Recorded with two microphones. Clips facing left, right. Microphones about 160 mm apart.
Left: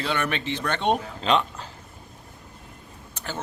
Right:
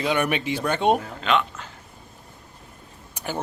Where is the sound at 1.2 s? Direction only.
35° left (ahead or behind).